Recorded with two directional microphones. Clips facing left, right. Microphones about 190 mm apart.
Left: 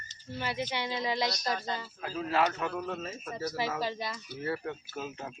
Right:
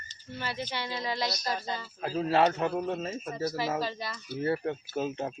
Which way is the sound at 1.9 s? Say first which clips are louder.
Right 5 dB; 35° right (ahead or behind).